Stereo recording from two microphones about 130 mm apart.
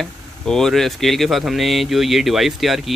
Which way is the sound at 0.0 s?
5° left (ahead or behind).